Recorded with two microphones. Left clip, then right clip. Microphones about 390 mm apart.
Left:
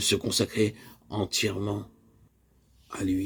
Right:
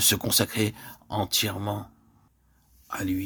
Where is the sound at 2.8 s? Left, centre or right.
Right.